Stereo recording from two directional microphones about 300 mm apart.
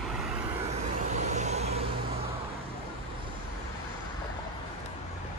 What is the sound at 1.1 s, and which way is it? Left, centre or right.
Vehicle, right.